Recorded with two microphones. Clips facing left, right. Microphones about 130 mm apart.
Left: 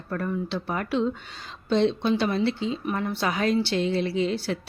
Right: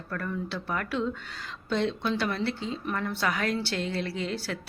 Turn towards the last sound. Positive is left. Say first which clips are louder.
# left 7 dB
turn(degrees=20)  # may be behind; listen again after turning